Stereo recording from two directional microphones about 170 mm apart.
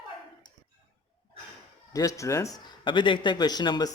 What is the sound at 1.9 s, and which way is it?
Speech, 20° left (ahead or behind).